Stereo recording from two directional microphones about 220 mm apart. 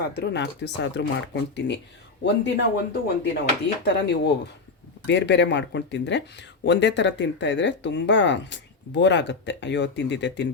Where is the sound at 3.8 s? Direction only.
50° left (ahead or behind).